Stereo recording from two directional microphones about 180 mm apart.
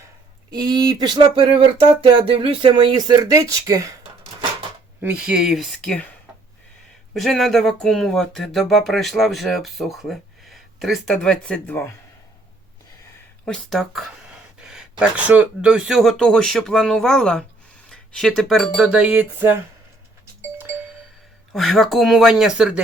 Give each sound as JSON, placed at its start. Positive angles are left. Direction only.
{"t": 0.5, "sound": "speech", "side_deg": -20}
{"t": 5.0, "sound": "speech", "side_deg": -5}
{"t": 7.1, "sound": "speech", "side_deg": 0}
{"t": 13.4, "sound": "speech", "side_deg": 5}
{"t": 21.5, "sound": "speech", "side_deg": 0}